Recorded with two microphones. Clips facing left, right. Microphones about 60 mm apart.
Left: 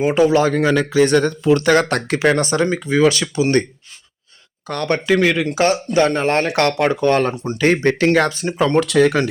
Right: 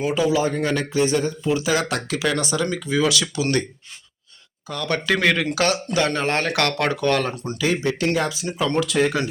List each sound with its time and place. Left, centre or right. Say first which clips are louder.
0.1 s speech: left 6 dB; left
0.3 s speech: left 6 dB; left
4.7 s speech: left 6 dB; left
5.1 s speech: left 3 dB; centre
5.5 s speech: left 5 dB; left
7.2 s speech: left 6 dB; left
7.6 s speech: left 7 dB; left
8.8 s speech: left 5 dB; left